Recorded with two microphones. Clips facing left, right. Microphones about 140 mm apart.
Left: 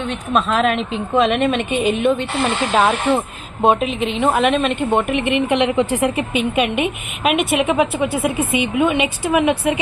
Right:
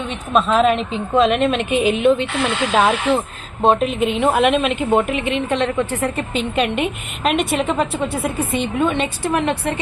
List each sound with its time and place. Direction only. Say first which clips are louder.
0.1 s a woman's voice: right 2 dB; centre (ahead or behind)
2.4 s speech: left 1 dB; 45° left (ahead or behind)
2.7 s a woman's voice: even; centre (ahead or behind)
5.5 s a woman's voice: left 3 dB; 10° left (ahead or behind)